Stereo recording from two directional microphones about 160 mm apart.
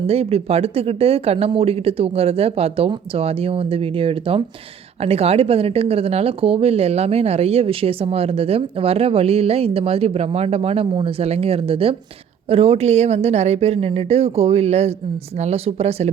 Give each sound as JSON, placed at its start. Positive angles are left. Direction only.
{"t": 0.1, "sound": "speech", "side_deg": -40}